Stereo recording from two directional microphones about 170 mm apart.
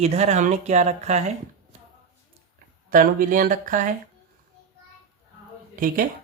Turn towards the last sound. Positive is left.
turn(degrees=-55)  # may be behind; listen again after turning